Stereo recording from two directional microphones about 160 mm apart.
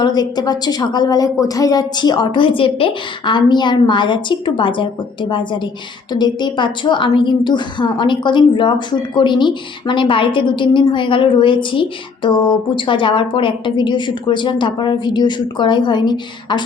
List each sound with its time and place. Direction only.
0.0 s a woman's voice: 25° left (ahead or behind)